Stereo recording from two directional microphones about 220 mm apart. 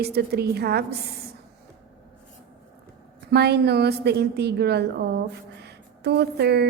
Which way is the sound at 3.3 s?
50° right (ahead or behind).